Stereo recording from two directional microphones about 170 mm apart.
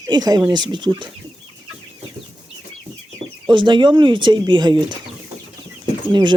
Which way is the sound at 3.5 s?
30° right (ahead or behind).